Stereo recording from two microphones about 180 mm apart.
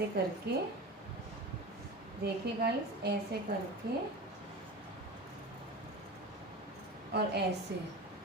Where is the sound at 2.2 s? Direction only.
65° right (ahead or behind).